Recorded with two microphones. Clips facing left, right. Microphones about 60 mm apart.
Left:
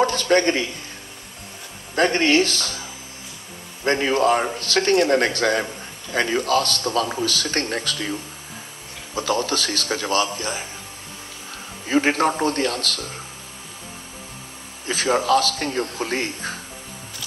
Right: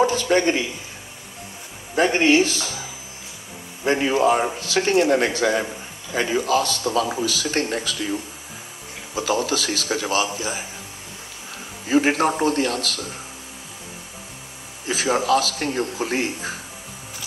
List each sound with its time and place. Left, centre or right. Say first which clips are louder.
0.0 s a man's voice: even; left
2.0 s speech: right 1 dB; left
3.8 s speech: even; left
9.1 s a man's voice: even; left
11.9 s speech: right 1 dB; left
14.9 s a man's voice: left 1 dB; left